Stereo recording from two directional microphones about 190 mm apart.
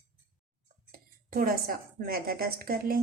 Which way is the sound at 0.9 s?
50° right (ahead or behind).